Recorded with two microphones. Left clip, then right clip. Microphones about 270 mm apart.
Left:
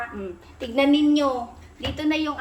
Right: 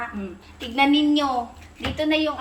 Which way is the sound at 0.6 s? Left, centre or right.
Centre.